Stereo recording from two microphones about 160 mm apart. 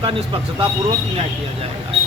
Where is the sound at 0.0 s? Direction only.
35° right (ahead or behind).